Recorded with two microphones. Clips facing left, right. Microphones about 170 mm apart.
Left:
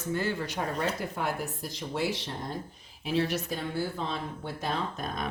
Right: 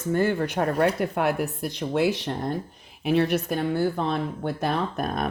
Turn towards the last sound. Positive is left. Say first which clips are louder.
# right 7 dB
turn(degrees=-60)  # may be behind; listen again after turning